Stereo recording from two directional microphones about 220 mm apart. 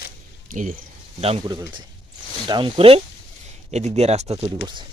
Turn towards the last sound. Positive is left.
turn(degrees=-30)  # may be behind; listen again after turning